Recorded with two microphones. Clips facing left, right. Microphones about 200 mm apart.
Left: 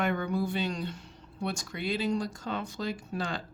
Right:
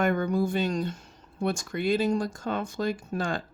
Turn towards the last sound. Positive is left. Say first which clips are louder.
# right 4 dB
turn(degrees=-50)  # may be behind; listen again after turning